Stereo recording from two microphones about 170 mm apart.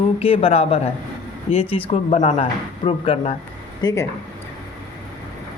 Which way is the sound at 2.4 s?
30° left (ahead or behind).